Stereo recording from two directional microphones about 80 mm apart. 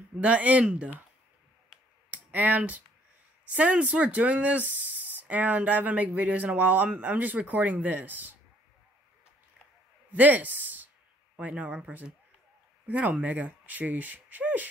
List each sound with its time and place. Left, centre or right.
0.2 s speech: centre
2.0 s clicking: centre
3.4 s speech: centre
10.1 s speech: centre